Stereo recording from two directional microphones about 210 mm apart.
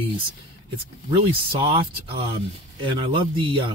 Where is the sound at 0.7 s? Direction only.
25° right (ahead or behind).